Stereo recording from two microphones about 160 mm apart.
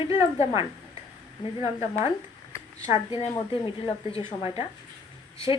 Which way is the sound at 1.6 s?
35° left (ahead or behind).